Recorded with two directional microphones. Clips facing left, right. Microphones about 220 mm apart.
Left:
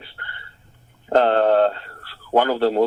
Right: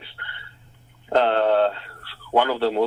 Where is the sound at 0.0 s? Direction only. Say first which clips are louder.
Left 2 dB; 45° left (ahead or behind).